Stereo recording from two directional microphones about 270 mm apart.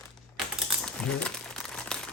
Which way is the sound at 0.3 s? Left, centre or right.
Centre.